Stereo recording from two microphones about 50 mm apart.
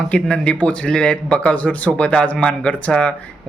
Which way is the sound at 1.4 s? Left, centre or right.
Left.